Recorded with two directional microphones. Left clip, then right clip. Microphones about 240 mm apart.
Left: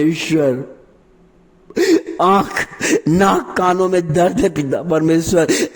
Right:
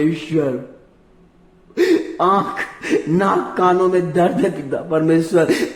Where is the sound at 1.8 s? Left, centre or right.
Left.